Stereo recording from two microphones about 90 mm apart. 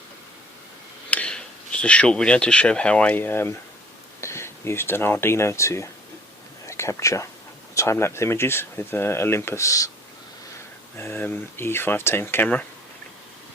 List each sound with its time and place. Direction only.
1.1 s speech: 15° left (ahead or behind); by 9.9 s 40° left (ahead or behind)
10.9 s speech: 25° left (ahead or behind)